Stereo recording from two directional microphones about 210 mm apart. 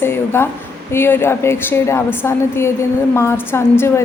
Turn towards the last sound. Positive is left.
turn(degrees=10)  # may be behind; listen again after turning